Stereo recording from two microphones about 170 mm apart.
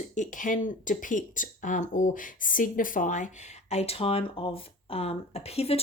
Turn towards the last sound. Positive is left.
turn(degrees=35)  # may be behind; listen again after turning